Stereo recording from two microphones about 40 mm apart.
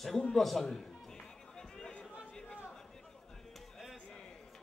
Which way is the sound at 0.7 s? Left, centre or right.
Centre.